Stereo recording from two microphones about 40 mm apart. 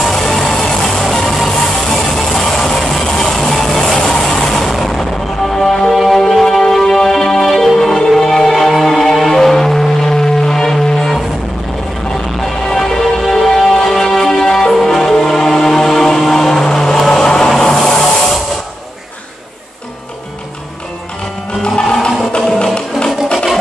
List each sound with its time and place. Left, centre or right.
0.0 s music: centre
3.9 s vehicle: centre
5.5 s music: centre
5.9 s music: centre
12.4 s music: centre
17.6 s a sound: centre
22.9 s music: left
23.3 s a sound: centre